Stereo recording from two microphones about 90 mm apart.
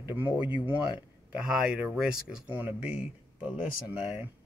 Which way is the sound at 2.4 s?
20° right (ahead or behind).